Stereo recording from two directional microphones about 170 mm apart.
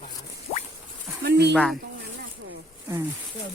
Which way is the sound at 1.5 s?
5° left (ahead or behind).